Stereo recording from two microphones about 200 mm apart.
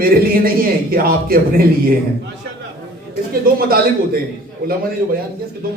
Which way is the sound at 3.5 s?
45° right (ahead or behind).